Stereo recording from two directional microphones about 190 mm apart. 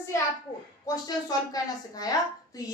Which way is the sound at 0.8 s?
20° left (ahead or behind).